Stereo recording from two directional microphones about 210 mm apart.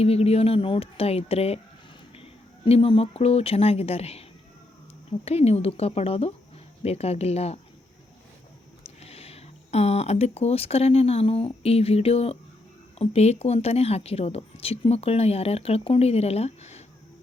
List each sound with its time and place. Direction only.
0.0 s speech: 30° left (ahead or behind)
2.6 s speech: 25° left (ahead or behind)
9.0 s speech: 30° left (ahead or behind)